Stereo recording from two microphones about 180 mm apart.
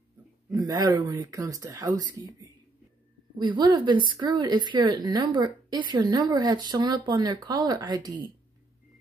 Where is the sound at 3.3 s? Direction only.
25° right (ahead or behind).